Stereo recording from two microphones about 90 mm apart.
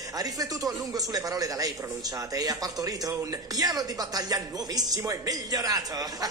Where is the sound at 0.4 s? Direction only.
45° right (ahead or behind).